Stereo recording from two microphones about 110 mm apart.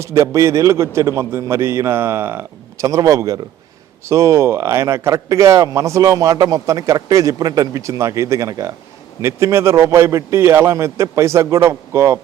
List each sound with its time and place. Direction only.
0.0 s speech: 25° right (ahead or behind)